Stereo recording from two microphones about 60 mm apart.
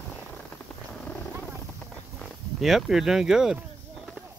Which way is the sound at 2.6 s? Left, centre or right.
Centre.